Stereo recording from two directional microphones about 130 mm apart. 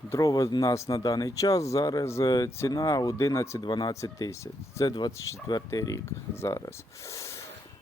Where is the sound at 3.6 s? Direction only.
35° left (ahead or behind).